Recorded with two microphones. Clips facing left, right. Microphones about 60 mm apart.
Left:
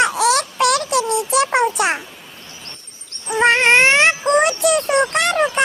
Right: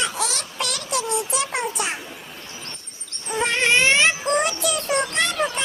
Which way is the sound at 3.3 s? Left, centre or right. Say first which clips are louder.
Left 7 dB; left.